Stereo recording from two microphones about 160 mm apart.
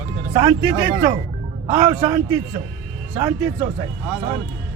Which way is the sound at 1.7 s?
25° right (ahead or behind).